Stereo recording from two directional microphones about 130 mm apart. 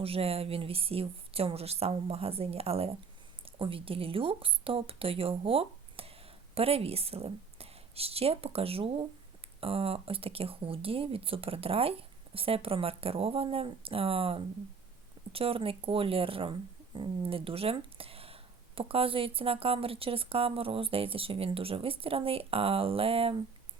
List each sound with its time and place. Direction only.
0.0 s speech: 50° right (ahead or behind)